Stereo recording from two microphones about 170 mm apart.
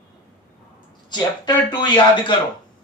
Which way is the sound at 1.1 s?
25° left (ahead or behind).